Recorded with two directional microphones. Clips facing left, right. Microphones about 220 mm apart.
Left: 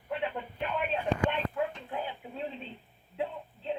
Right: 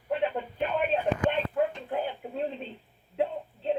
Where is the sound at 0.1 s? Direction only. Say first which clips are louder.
Right 6 dB; 40° right (ahead or behind).